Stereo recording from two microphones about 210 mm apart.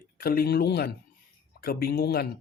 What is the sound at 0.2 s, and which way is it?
Speech, 45° left (ahead or behind).